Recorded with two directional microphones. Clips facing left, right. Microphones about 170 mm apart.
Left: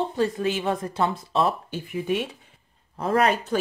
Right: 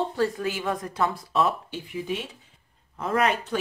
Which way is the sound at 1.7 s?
55° left (ahead or behind).